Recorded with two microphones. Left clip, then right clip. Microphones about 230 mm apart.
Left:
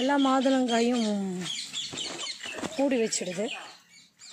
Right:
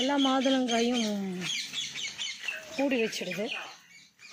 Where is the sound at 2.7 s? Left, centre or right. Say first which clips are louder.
Left 2 dB; centre.